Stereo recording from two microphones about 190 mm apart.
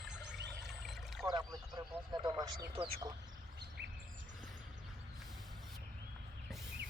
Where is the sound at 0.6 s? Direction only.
Centre (ahead or behind).